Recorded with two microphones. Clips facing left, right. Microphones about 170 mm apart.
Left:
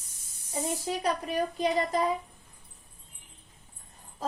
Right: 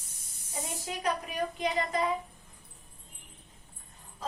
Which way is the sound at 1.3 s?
35° left (ahead or behind).